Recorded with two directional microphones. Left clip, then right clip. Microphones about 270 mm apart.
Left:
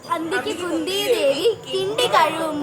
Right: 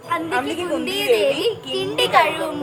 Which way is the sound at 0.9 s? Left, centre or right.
Centre.